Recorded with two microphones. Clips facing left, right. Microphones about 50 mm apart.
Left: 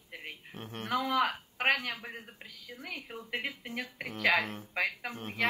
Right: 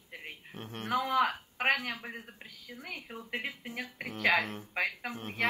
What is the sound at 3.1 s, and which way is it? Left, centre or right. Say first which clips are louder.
Speech: even; left.